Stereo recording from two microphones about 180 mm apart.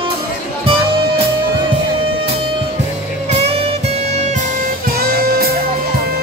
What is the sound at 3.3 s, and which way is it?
Music, 35° right (ahead or behind).